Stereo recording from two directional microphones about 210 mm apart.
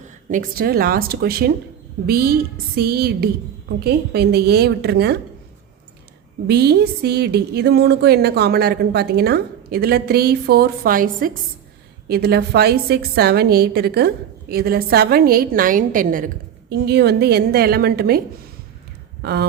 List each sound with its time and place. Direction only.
0.3 s speech: 40° right (ahead or behind)
6.5 s speech: 50° right (ahead or behind)
19.2 s speech: 50° right (ahead or behind)